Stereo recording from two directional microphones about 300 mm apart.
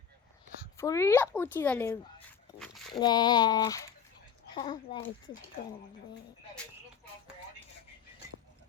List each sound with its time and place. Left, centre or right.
0.8 s speech: centre
2.6 s dog: centre
3.0 s speech: centre